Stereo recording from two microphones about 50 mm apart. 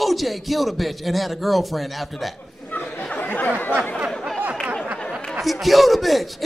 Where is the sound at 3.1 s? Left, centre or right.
Left.